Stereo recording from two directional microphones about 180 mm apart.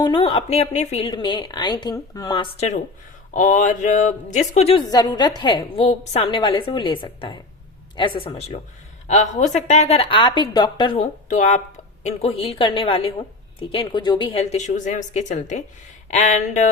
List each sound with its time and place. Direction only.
0.0 s speech: 30° left (ahead or behind)
1.0 s a woman's voice: 25° left (ahead or behind)
3.3 s speech: 45° left (ahead or behind)
4.9 s a woman's voice: 20° left (ahead or behind); by 16.6 s 40° left (ahead or behind)